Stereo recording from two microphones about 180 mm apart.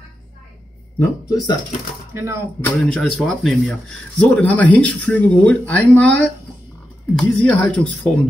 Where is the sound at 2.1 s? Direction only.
15° right (ahead or behind).